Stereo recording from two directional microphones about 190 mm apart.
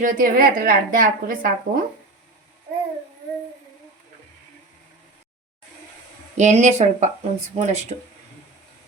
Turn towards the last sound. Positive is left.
turn(degrees=-35)  # may be behind; listen again after turning